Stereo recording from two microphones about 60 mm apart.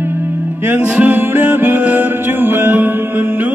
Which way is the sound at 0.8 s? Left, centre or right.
Right.